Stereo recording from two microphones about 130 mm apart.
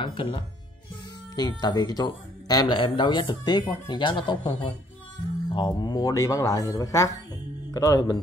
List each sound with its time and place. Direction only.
0.0 s speech: 40° left (ahead or behind)